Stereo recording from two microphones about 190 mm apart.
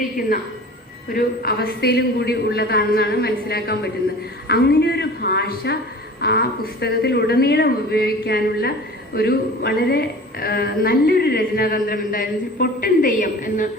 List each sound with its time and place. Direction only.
1.1 s a man's voice: 55° left (ahead or behind)